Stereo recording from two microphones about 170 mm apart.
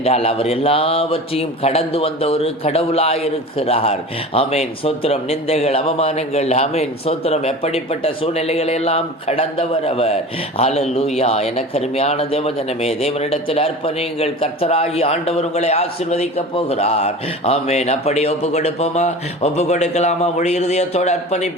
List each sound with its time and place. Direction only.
0.0 s speech: 35° left (ahead or behind)